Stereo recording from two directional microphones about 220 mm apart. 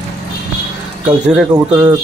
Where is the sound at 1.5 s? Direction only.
10° right (ahead or behind).